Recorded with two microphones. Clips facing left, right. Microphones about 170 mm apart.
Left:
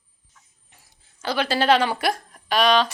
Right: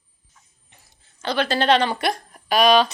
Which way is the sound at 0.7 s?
10° left (ahead or behind).